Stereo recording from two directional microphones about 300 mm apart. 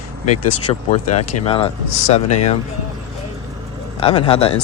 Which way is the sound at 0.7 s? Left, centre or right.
Centre.